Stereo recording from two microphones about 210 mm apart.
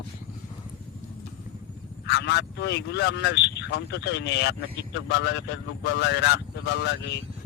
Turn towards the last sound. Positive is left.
turn(degrees=55)  # may be behind; listen again after turning